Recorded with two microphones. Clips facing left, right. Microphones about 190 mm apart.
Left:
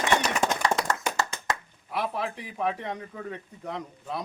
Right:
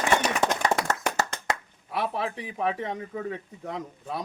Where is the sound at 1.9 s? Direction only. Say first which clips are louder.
Right 1 dB; centre (ahead or behind).